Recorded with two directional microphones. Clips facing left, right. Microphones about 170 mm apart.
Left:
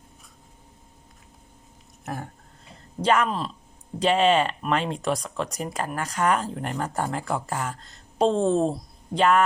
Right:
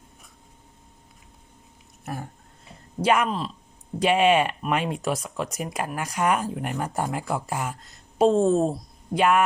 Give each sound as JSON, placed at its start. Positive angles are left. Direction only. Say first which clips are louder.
{"t": 3.0, "sound": "speech", "louder": "even", "side_deg": -10}
{"t": 3.2, "sound": "speech", "louder": "even", "side_deg": 0}
{"t": 4.0, "sound": "speech", "louder": "right 1 dB", "side_deg": -10}